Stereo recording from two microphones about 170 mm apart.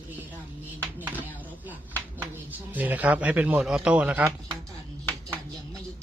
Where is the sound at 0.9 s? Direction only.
10° right (ahead or behind).